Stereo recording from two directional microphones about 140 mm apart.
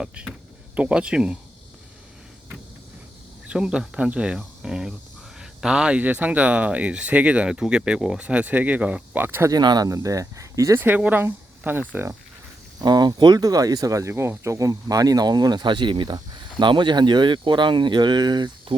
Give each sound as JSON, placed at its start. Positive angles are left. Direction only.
{"t": 0.0, "sound": "speech", "side_deg": -10}
{"t": 3.4, "sound": "speech", "side_deg": -5}
{"t": 9.5, "sound": "speech", "side_deg": -30}
{"t": 12.8, "sound": "speech", "side_deg": -30}